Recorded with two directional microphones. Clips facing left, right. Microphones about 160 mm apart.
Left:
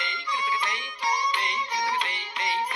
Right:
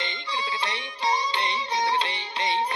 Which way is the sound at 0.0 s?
30° right (ahead or behind).